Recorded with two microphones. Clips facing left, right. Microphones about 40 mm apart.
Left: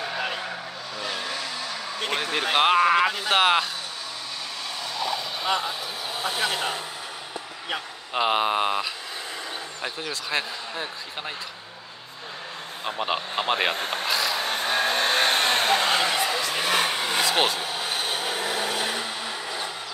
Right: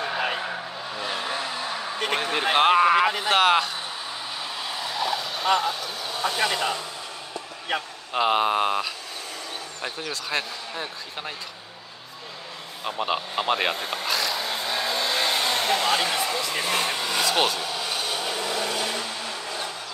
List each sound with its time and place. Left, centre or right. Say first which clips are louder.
0.0 s vehicle: right 2 dB; centre
0.9 s vehicle: right 2 dB; right
2.5 s speech: right 1 dB; centre
4.6 s vehicle: right 2 dB; centre
6.0 s speech: right 2 dB; centre
8.1 s speech: right 1 dB; centre
12.8 s speech: right 1 dB; centre
13.7 s speech: left 2 dB; left
14.0 s a sound: even; centre
14.3 s vehicle: left 2 dB; left
17.2 s speech: even; centre
17.6 s vehicle: even; left